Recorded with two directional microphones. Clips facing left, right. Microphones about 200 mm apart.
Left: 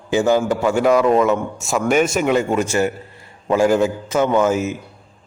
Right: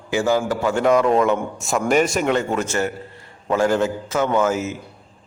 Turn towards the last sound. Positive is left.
turn(degrees=15)  # may be behind; listen again after turning